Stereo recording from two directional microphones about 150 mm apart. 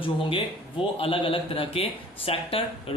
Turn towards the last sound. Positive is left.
turn(degrees=40)  # may be behind; listen again after turning